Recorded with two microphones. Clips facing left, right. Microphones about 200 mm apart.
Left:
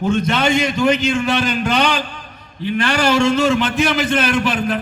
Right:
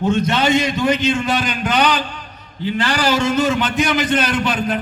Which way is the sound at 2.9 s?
25° left (ahead or behind).